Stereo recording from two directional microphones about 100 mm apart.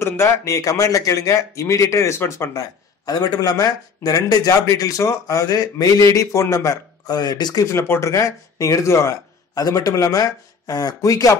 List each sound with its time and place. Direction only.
0.0 s speech: 25° left (ahead or behind)